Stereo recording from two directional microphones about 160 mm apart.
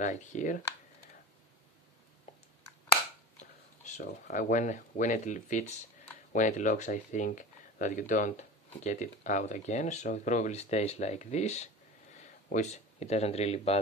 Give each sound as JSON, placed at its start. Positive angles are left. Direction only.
{"t": 0.0, "sound": "speech", "side_deg": 50}
{"t": 4.0, "sound": "speech", "side_deg": 55}